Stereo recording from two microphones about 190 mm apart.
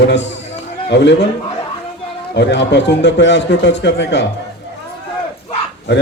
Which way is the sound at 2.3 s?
65° left (ahead or behind).